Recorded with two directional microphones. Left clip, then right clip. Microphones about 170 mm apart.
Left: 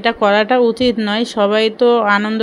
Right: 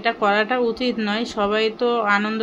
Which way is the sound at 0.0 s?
40° left (ahead or behind).